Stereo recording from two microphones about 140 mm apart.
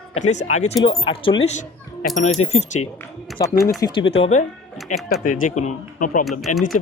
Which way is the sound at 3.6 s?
25° left (ahead or behind).